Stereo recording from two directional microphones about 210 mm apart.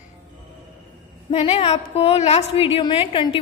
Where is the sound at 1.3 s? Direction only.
25° left (ahead or behind).